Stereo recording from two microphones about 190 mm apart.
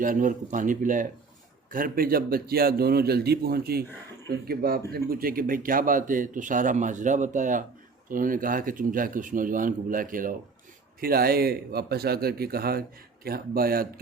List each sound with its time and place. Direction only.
0.0 s speech: 45° right (ahead or behind)